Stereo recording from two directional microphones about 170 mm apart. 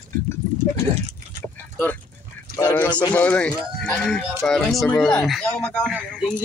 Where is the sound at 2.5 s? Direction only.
10° left (ahead or behind).